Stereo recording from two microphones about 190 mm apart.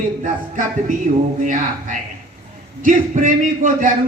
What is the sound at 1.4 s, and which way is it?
A man's voice, 40° right (ahead or behind).